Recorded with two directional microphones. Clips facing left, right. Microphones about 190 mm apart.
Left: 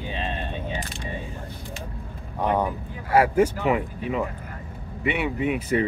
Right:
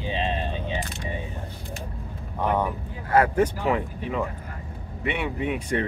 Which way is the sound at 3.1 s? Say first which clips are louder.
Left 1 dB; 10° left (ahead or behind).